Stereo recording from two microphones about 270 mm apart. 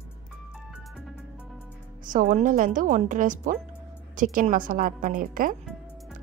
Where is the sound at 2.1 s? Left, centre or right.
Right.